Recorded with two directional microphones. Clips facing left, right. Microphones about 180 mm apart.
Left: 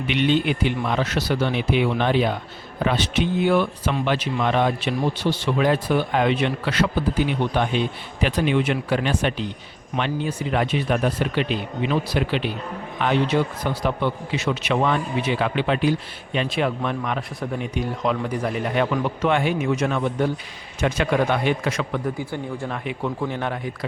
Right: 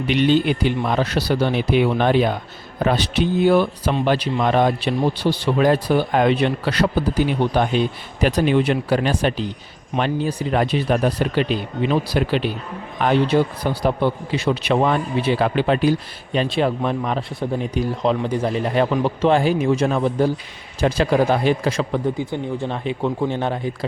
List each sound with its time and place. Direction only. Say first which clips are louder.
0.1 s a man's voice: right 4 dB; 35° right (ahead or behind)